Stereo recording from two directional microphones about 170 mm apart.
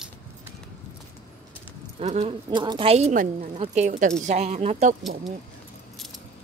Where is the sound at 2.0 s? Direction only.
40° right (ahead or behind).